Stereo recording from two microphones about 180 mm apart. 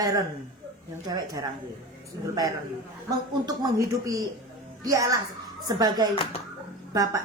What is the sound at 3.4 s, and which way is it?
Speech, 20° right (ahead or behind).